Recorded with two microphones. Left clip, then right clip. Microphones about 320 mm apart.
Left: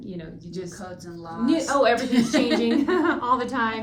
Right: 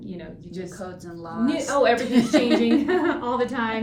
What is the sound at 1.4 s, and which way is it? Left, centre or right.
Speech, centre.